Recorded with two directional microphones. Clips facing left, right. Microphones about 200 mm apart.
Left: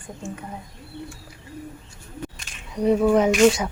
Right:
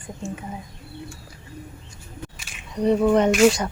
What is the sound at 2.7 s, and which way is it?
Speech, 5° left (ahead or behind).